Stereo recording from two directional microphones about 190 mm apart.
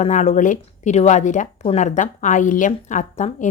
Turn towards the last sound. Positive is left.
turn(degrees=40)  # may be behind; listen again after turning